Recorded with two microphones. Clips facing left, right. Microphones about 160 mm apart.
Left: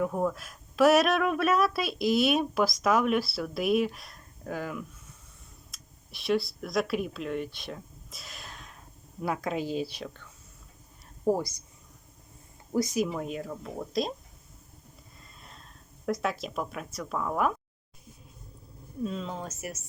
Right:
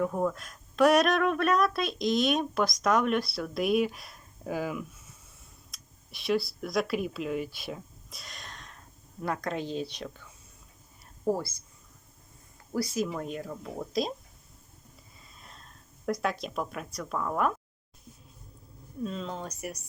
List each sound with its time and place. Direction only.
0.0 s a woman's voice: 5° left (ahead or behind)
11.3 s a woman's voice: 15° left (ahead or behind)
12.7 s speech: 20° left (ahead or behind)
13.1 s speech: centre (ahead or behind)
15.2 s a sound: centre (ahead or behind)
16.2 s speech: centre (ahead or behind)
19.0 s speech: centre (ahead or behind)